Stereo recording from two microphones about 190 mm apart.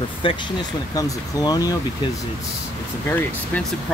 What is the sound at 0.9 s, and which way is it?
Speech, 20° left (ahead or behind).